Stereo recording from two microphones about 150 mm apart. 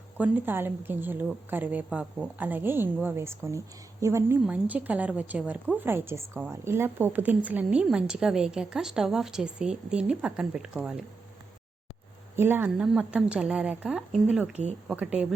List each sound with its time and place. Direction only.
0.2 s a woman's voice: 15° right (ahead or behind)
12.4 s a woman's voice: 15° right (ahead or behind)
14.5 s speech: 50° right (ahead or behind)
14.8 s speech: 5° right (ahead or behind)